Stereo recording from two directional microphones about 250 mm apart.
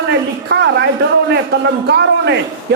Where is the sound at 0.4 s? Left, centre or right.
Right.